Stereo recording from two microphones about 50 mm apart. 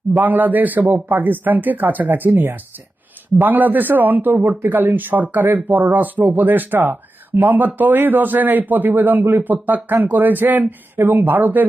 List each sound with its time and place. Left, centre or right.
0.1 s speech: right